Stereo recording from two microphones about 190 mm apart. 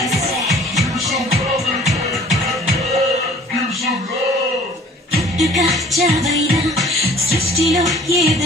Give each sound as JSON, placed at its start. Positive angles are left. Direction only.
{"t": 0.1, "sound": "music", "side_deg": 0}
{"t": 5.4, "sound": "music", "side_deg": 0}
{"t": 8.1, "sound": "music", "side_deg": -15}